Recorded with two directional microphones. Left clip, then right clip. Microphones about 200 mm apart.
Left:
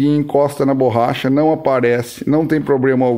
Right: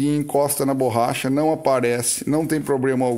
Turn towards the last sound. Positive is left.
turn(degrees=-5)  # may be behind; listen again after turning